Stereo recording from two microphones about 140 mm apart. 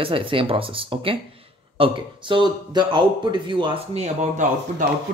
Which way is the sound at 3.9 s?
50° right (ahead or behind).